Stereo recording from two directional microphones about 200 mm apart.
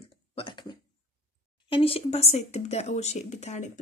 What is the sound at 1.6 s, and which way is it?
Speech, 25° left (ahead or behind).